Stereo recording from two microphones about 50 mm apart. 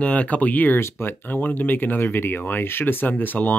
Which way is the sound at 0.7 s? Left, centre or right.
Left.